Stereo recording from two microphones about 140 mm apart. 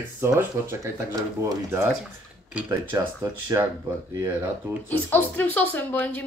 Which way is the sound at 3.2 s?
20° right (ahead or behind).